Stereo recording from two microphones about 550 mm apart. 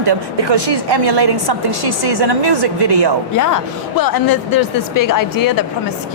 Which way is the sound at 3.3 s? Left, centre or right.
Left.